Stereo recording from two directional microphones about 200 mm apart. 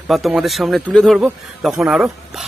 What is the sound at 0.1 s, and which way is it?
A man's voice, centre (ahead or behind).